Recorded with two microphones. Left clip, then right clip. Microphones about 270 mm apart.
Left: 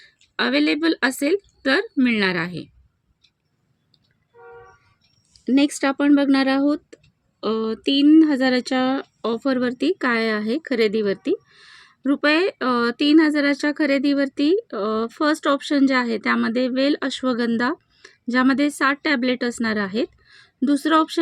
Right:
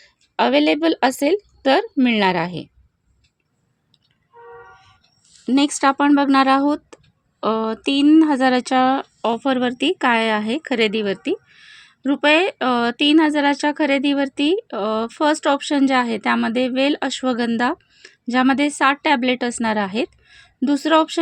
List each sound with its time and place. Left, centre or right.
0.0 s speech: centre
5.5 s speech: centre